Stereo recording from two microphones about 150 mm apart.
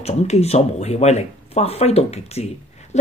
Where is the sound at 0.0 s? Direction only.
45° left (ahead or behind).